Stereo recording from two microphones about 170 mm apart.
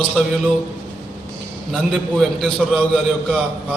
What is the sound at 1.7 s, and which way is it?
A man's voice, 5° left (ahead or behind).